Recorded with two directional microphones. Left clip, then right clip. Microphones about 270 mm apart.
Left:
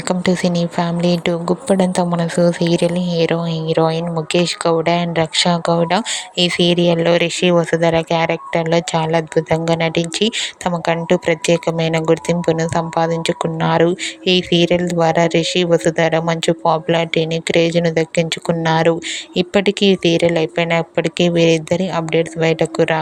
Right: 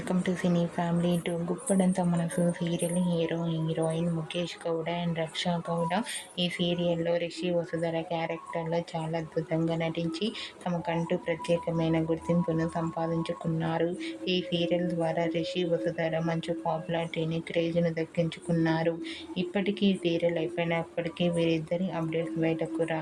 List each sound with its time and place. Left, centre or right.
0.3 s a woman's voice: left